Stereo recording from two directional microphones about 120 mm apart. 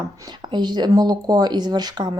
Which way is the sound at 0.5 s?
35° right (ahead or behind).